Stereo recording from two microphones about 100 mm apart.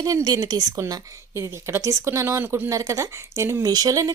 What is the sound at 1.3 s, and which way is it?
A woman's voice, 25° right (ahead or behind).